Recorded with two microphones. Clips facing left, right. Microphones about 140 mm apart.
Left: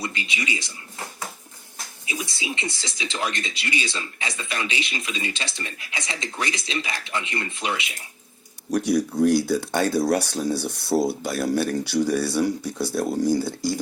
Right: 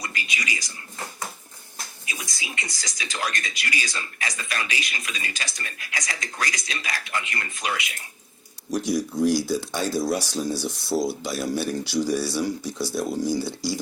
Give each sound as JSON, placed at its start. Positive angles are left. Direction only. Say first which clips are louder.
{"t": 0.0, "sound": "speech", "louder": "left 3 dB", "side_deg": 25}
{"t": 2.0, "sound": "speech", "louder": "left 7 dB", "side_deg": 25}
{"t": 8.7, "sound": "speech", "louder": "left 3 dB", "side_deg": 65}